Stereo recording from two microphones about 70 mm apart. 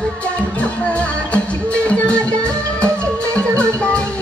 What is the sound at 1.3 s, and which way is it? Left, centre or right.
Music, centre.